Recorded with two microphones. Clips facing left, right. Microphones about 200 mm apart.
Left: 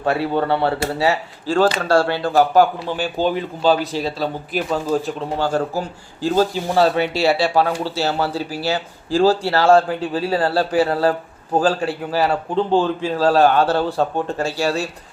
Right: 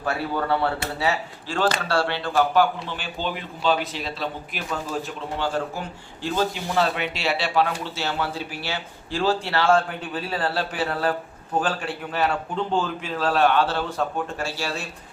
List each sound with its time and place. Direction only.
0.0 s speech: 25° left (ahead or behind)
1.0 s speech: 40° left (ahead or behind)
12.1 s speech: 35° left (ahead or behind)